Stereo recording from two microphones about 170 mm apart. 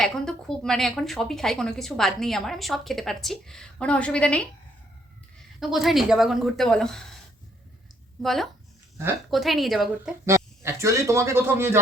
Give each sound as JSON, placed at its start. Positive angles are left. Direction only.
{"t": 0.0, "sound": "a woman's voice", "side_deg": 5}
{"t": 5.5, "sound": "a woman's voice", "side_deg": 0}
{"t": 8.2, "sound": "a woman's voice", "side_deg": 0}
{"t": 10.2, "sound": "a man's voice", "side_deg": -15}